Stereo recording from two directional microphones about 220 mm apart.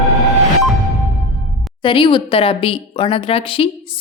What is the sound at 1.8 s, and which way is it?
Speech, 20° left (ahead or behind).